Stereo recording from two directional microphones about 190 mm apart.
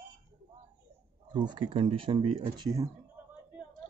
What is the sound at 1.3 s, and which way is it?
Speech, 25° right (ahead or behind).